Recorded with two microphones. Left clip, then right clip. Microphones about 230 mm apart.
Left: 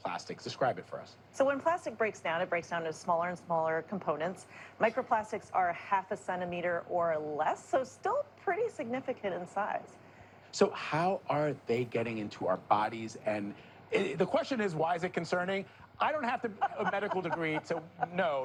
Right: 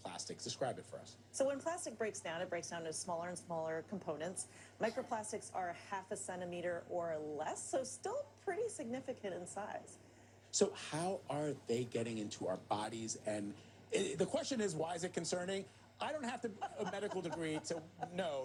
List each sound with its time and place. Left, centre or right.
0.0 s speech: centre